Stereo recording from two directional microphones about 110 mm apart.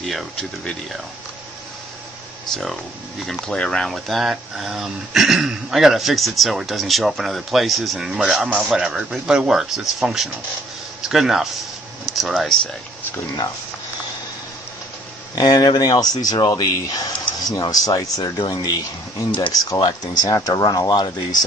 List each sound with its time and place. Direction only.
0.0 s speech: centre (ahead or behind)
2.4 s speech: 5° left (ahead or behind)
15.3 s speech: 35° left (ahead or behind)